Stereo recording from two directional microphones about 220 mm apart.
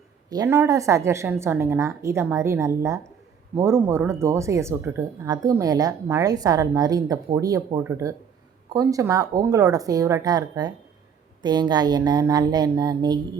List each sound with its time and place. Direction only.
0.3 s a woman's voice: 15° right (ahead or behind)